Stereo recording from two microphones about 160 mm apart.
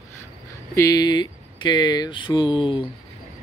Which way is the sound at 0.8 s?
25° left (ahead or behind).